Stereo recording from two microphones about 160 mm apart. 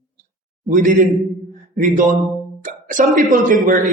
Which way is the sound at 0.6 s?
50° right (ahead or behind).